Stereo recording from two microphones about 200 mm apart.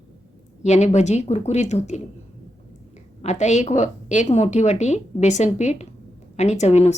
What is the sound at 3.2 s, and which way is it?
A woman's voice, 35° left (ahead or behind).